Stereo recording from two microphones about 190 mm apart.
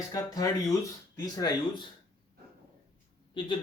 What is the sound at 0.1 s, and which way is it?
Speech, 20° left (ahead or behind).